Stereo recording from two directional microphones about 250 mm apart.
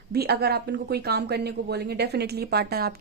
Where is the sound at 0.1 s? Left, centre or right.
Right.